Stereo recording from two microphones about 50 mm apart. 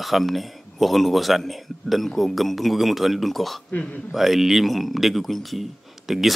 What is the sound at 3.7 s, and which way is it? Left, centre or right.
Speech, left.